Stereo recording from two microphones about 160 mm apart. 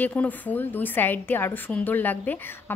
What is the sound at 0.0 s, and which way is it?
Speech, 10° left (ahead or behind).